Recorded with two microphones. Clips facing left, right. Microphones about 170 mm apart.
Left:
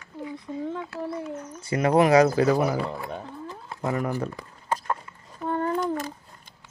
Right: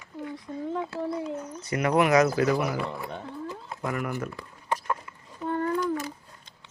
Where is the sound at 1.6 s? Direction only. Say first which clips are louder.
Left 3 dB; 30° left (ahead or behind).